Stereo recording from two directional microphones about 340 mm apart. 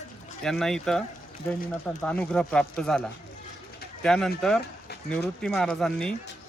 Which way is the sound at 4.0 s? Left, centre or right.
Centre.